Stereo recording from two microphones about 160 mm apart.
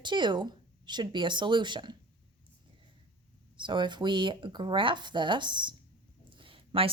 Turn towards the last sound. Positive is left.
turn(degrees=-35)  # may be behind; listen again after turning